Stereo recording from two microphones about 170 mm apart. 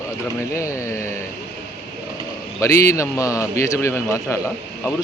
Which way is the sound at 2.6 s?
15° left (ahead or behind).